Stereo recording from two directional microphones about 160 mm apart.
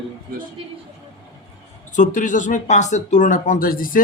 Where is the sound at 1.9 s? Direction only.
50° left (ahead or behind).